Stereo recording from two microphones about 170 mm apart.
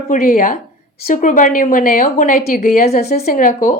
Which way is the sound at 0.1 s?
50° left (ahead or behind).